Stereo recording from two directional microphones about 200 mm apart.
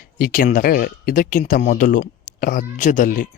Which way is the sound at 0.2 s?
45° left (ahead or behind).